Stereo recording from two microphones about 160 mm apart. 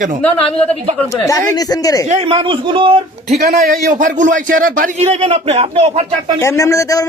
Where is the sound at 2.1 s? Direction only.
35° right (ahead or behind).